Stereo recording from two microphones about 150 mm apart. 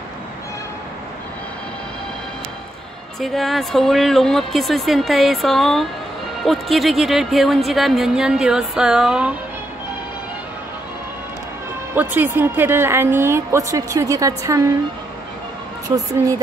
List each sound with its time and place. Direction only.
3.2 s a woman's voice: centre (ahead or behind)
11.9 s a woman's voice: 10° right (ahead or behind)